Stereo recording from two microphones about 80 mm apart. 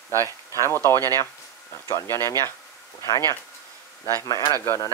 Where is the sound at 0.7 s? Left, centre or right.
Left.